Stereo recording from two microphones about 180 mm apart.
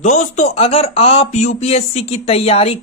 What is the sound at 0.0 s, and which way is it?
Speech, 40° left (ahead or behind).